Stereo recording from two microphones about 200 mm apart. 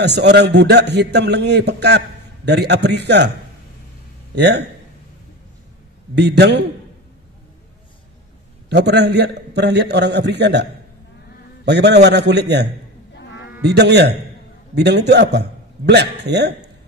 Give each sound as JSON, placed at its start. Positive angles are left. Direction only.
{"t": 0.0, "sound": "a man's voice", "side_deg": -60}
{"t": 4.4, "sound": "a man's voice", "side_deg": -60}
{"t": 6.1, "sound": "a man's voice", "side_deg": -55}
{"t": 8.6, "sound": "a man's voice", "side_deg": -55}